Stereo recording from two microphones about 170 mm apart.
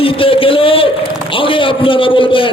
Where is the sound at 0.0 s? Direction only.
30° left (ahead or behind).